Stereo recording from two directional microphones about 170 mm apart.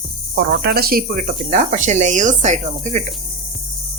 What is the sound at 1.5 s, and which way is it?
Speech, 45° right (ahead or behind).